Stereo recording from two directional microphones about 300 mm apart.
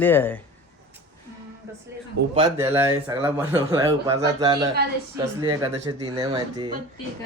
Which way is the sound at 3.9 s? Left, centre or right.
Centre.